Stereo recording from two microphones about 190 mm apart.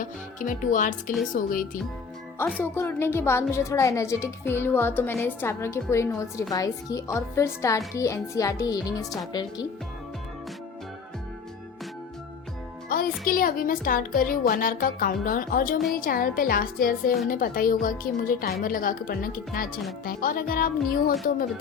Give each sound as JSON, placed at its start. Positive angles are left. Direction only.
{"t": 0.0, "sound": "a woman's voice", "side_deg": 45}
{"t": 2.6, "sound": "a child's voice", "side_deg": 10}
{"t": 12.9, "sound": "a woman's voice", "side_deg": 50}